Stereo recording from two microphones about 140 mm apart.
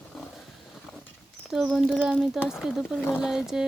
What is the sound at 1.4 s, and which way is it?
Speech, centre (ahead or behind).